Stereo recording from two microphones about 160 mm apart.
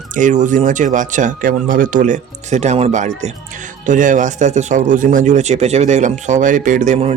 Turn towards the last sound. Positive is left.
turn(degrees=-45)  # may be behind; listen again after turning